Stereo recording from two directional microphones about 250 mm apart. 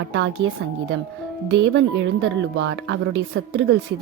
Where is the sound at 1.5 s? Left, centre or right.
Right.